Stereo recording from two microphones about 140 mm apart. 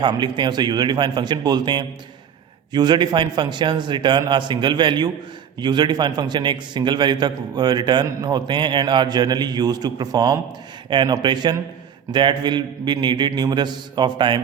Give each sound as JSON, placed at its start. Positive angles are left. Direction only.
{"t": 0.0, "sound": "a man's voice", "side_deg": -30}